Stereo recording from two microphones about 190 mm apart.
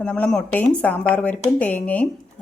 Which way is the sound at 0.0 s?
5° left (ahead or behind).